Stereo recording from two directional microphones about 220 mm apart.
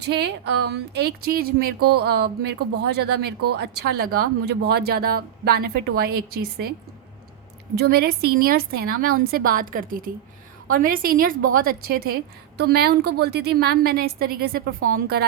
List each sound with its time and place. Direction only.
0.0 s a woman's voice: 50° right (ahead or behind)
7.8 s a woman's voice: 45° right (ahead or behind)